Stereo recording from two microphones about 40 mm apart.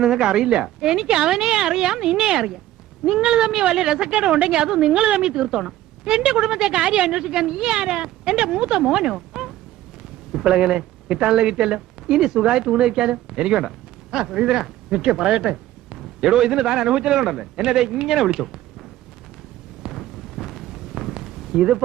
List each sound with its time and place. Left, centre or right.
0.0 s a woman's voice: centre
9.3 s a sound: centre
10.4 s a woman's voice: right
17.2 s a man's voice: centre
17.6 s a woman's voice: centre
19.9 s a sound: centre
21.5 s a woman's voice: right